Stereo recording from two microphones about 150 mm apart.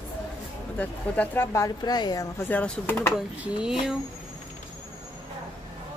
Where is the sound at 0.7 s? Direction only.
10° left (ahead or behind).